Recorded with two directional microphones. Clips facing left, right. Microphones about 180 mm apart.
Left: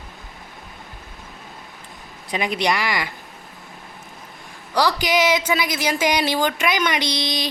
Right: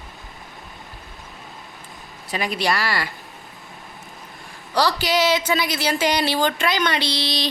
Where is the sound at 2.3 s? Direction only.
20° left (ahead or behind).